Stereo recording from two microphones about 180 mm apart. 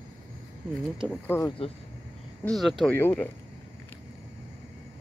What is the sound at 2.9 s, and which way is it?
Speech, 10° left (ahead or behind).